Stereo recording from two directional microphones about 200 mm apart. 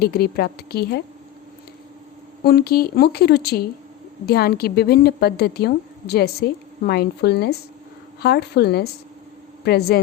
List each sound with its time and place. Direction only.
0.0 s a woman's voice: 50° left (ahead or behind)
2.4 s a woman's voice: 50° left (ahead or behind)